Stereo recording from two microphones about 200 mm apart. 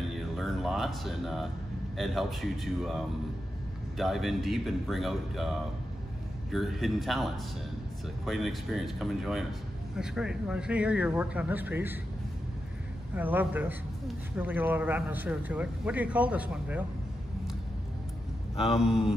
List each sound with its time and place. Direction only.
0.1 s a sound: centre (ahead or behind)
2.0 s speech: centre (ahead or behind)
8.3 s speech: centre (ahead or behind)
13.1 s speech: 10° right (ahead or behind)
18.6 s speech: centre (ahead or behind)